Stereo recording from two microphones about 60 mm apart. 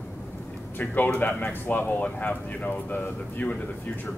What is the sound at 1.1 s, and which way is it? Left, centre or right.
Speech, left.